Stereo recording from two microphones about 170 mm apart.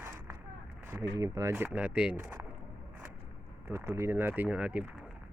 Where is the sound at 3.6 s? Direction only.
15° right (ahead or behind).